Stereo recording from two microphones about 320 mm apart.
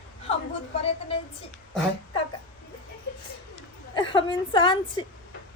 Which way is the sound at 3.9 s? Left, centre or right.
Centre.